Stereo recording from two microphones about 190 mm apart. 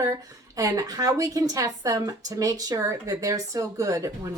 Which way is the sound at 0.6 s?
20° right (ahead or behind).